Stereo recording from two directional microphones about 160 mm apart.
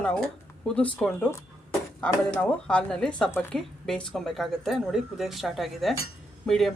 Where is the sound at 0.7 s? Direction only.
5° left (ahead or behind).